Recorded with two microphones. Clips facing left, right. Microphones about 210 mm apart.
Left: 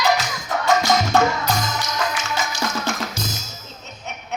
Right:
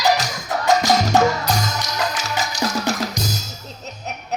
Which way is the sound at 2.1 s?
40° right (ahead or behind).